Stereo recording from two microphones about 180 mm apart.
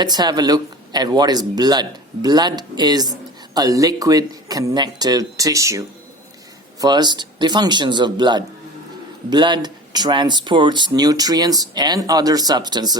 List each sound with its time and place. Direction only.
0.0 s speech: 25° right (ahead or behind)